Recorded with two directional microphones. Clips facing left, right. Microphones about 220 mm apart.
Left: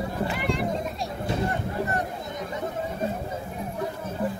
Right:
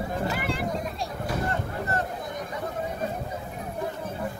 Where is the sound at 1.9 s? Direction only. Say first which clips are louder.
Even; 15° left (ahead or behind).